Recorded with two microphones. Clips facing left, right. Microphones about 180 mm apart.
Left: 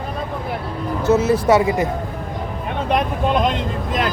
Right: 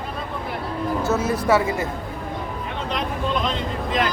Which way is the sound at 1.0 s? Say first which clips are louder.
Left 9 dB; 20° left (ahead or behind).